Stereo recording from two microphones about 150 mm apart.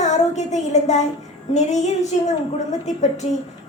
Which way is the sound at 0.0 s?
50° left (ahead or behind).